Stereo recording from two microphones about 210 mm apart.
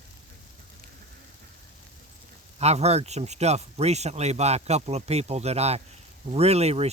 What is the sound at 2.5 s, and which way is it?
Speech, 30° right (ahead or behind).